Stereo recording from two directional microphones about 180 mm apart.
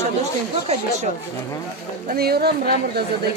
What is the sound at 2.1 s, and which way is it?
Speech, 60° right (ahead or behind).